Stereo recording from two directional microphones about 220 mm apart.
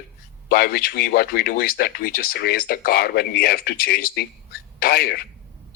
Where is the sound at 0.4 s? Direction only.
45° left (ahead or behind).